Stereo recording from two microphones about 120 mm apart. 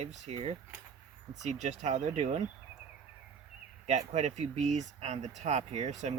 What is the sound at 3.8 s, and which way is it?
Speech, 65° right (ahead or behind).